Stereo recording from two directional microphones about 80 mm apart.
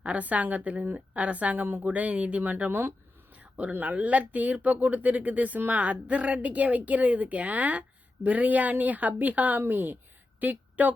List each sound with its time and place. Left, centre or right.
0.0 s a woman's voice: centre